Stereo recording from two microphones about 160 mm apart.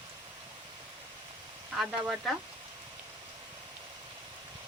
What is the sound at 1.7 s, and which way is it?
Speech, 5° right (ahead or behind).